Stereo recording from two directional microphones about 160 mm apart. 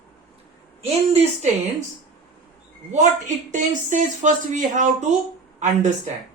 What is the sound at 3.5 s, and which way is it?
Speech, 50° right (ahead or behind).